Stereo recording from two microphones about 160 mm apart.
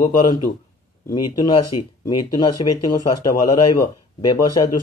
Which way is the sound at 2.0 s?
25° left (ahead or behind).